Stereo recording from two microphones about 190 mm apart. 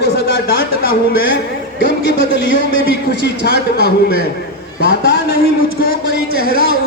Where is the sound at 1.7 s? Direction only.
75° left (ahead or behind).